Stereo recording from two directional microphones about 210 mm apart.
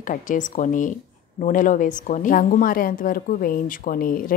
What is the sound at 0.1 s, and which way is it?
A woman's voice, 40° left (ahead or behind).